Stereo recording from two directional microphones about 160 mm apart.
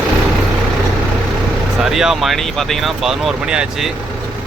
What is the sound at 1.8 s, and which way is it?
Speech, 5° right (ahead or behind).